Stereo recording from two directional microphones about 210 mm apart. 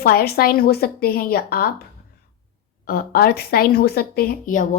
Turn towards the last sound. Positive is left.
turn(degrees=40)  # may be behind; listen again after turning